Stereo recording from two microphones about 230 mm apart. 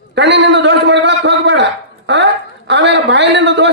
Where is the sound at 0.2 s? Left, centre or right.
Right.